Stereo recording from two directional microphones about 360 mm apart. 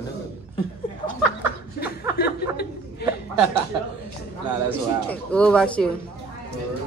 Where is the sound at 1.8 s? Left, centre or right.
Left.